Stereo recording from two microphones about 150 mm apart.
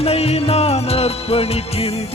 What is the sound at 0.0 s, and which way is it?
Music, 45° left (ahead or behind).